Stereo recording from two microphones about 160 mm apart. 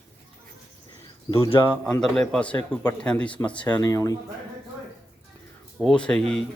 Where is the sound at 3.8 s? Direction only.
20° left (ahead or behind).